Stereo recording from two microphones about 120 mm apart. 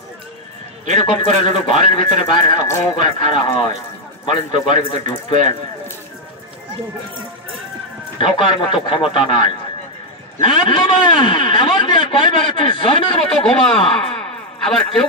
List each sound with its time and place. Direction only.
1.0 s speech: 45° left (ahead or behind)
8.2 s speech: 45° left (ahead or behind)
10.7 s a man's voice: 40° left (ahead or behind)
13.3 s speech: 5° left (ahead or behind)